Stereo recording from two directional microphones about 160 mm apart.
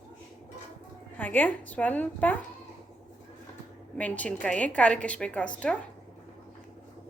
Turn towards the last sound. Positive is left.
turn(degrees=5)  # may be behind; listen again after turning